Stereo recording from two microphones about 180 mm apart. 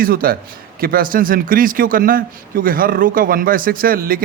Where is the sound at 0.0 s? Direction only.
55° right (ahead or behind).